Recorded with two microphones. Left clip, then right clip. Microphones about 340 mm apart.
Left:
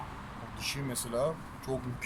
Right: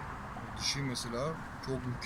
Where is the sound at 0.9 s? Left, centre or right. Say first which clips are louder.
Left 4 dB; left.